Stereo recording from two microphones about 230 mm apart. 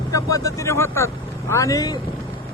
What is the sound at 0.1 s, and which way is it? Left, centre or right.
Speech, centre.